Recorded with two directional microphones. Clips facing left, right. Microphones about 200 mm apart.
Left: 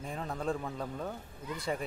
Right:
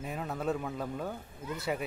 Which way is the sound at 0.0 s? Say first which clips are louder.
Right 1 dB; 5° right (ahead or behind).